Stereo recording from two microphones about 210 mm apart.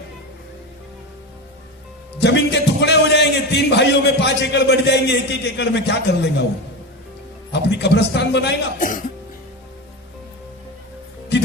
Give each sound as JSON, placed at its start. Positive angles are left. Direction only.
{"t": 2.2, "sound": "a man's voice", "side_deg": 55}
{"t": 7.5, "sound": "a man's voice", "side_deg": 55}
{"t": 8.8, "sound": "speech", "side_deg": 40}